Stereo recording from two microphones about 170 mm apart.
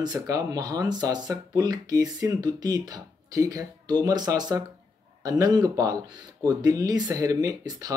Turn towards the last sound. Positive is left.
turn(degrees=-20)  # may be behind; listen again after turning